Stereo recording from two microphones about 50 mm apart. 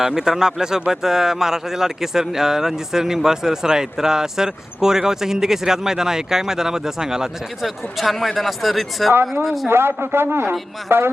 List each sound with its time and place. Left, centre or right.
0.0 s a man's voice: centre
9.6 s a man's voice: right